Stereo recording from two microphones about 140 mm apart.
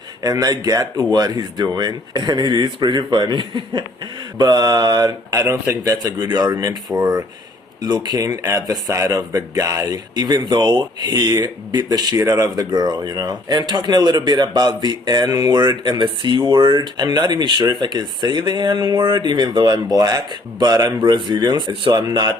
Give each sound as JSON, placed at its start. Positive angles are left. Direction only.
{"t": 0.2, "sound": "speech", "side_deg": -25}
{"t": 7.8, "sound": "speech", "side_deg": -30}